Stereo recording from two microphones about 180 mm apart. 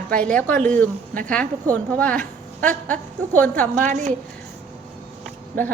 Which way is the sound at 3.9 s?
40° right (ahead or behind).